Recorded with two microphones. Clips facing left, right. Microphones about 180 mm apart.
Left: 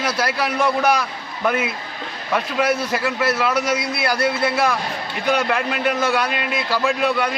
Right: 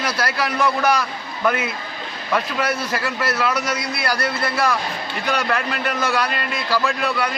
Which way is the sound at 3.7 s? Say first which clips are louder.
Left 2 dB; 25° left (ahead or behind).